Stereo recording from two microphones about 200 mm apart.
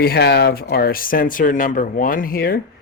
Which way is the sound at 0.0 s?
55° left (ahead or behind).